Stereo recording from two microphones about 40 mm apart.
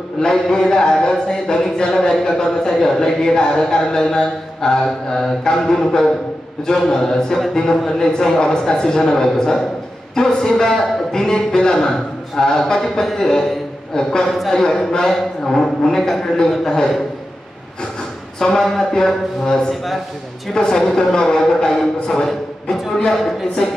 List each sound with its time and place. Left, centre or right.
0.2 s speech: left
13.0 s music: centre
13.9 s speech: centre
18.4 s speech: centre
19.7 s music: centre
20.5 s speech: left